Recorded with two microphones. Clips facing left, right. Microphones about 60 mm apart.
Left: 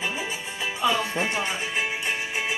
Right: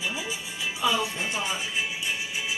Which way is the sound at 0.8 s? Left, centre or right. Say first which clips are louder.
Left 2 dB; left.